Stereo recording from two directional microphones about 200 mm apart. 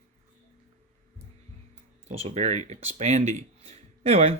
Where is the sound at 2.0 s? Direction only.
35° right (ahead or behind).